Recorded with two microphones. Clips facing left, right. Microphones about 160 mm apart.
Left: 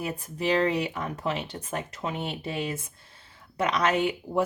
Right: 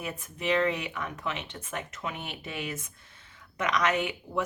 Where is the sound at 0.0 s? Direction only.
35° left (ahead or behind).